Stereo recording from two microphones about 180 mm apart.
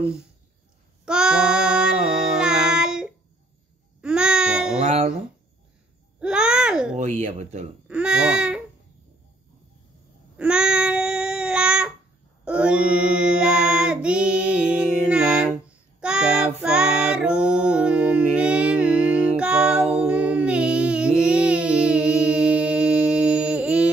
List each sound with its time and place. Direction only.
1.0 s child singing: 5° right (ahead or behind)
4.0 s babbling: 5° right (ahead or behind)
6.1 s babbling: 5° right (ahead or behind)
7.0 s speech: 40° right (ahead or behind)
7.9 s speech: 5° right (ahead or behind)
10.3 s babbling: 5° right (ahead or behind)
12.4 s child singing: 5° right (ahead or behind)